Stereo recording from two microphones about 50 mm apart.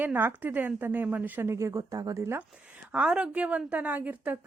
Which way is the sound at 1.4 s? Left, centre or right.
Right.